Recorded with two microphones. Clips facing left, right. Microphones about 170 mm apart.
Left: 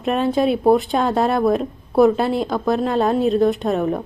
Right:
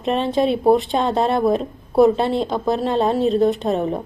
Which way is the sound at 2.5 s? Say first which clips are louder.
Even; 25° right (ahead or behind).